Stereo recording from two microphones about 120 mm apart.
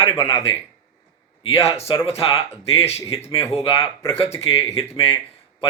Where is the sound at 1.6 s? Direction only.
60° left (ahead or behind).